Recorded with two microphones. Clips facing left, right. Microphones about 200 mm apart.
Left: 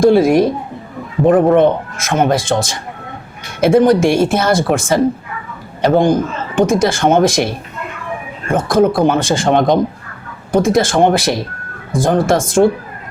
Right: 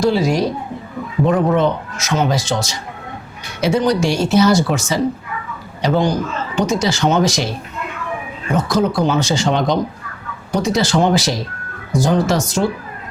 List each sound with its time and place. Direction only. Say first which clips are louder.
0.0 s speech: left 6 dB; 55° left (ahead or behind)